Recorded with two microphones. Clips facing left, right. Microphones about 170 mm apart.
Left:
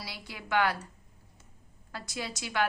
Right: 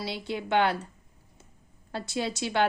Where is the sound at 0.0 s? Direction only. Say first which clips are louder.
Right 11 dB; 25° right (ahead or behind).